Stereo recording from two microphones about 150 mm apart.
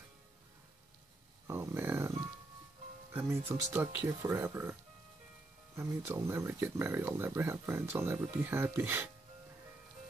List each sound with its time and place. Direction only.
1.5 s a sound: 15° right (ahead or behind)
3.1 s speech: 15° right (ahead or behind)
5.8 s speech: 20° right (ahead or behind)